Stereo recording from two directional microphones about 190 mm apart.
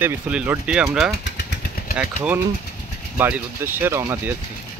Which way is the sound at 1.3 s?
55° left (ahead or behind).